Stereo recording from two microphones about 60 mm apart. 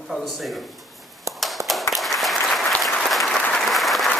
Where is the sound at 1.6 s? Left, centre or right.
Right.